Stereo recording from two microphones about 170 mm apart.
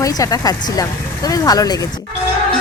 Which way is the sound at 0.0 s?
20° left (ahead or behind).